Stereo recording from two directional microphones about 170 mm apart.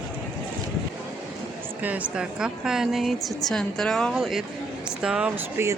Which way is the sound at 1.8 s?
10° right (ahead or behind).